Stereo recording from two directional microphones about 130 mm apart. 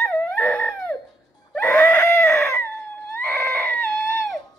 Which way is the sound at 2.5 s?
20° left (ahead or behind).